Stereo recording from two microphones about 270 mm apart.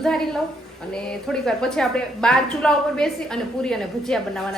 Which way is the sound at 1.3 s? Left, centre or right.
Centre.